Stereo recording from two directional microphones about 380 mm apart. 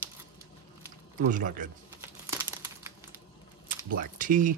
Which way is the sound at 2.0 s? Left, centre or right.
Centre.